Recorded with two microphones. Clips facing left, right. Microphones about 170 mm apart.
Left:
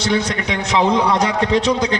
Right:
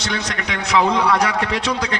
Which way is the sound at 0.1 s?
25° left (ahead or behind).